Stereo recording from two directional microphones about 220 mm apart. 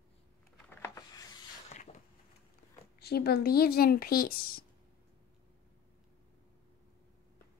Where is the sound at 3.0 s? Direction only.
45° left (ahead or behind).